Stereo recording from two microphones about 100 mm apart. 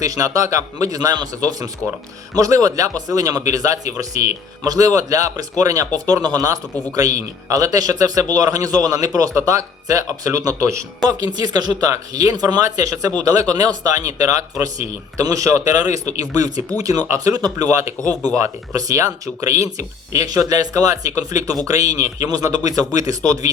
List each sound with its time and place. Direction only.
0.0 s speech: 35° right (ahead or behind)